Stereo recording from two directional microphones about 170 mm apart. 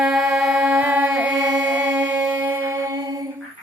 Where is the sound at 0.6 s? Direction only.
10° right (ahead or behind).